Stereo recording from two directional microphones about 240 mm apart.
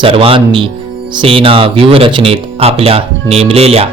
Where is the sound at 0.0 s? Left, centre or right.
Right.